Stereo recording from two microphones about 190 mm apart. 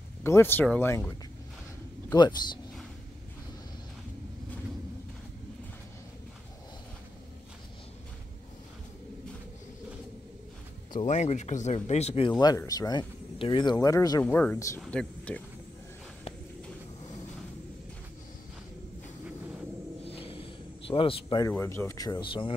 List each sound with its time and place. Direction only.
0.2 s speech: 10° left (ahead or behind)
11.0 s speech: 35° left (ahead or behind); by 15.4 s 5° left (ahead or behind)
20.1 s a sound: 30° left (ahead or behind)
21.5 s speech: 15° left (ahead or behind)